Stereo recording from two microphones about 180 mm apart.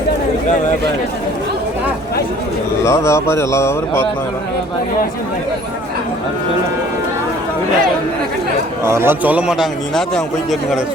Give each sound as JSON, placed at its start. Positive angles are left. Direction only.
{"t": 2.8, "sound": "speech", "side_deg": 15}
{"t": 8.8, "sound": "a man's voice", "side_deg": -15}